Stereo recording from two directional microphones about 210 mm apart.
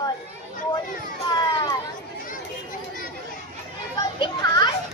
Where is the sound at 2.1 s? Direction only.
40° left (ahead or behind).